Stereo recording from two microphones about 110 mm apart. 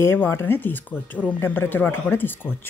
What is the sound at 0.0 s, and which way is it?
Speech, 20° left (ahead or behind).